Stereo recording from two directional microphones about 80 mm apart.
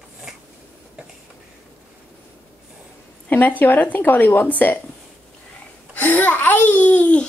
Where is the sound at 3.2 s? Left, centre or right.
Left.